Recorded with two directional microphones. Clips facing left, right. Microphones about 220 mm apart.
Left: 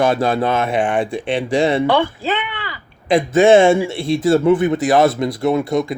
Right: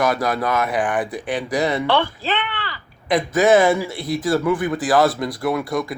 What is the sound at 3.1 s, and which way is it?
A man's voice, 25° left (ahead or behind).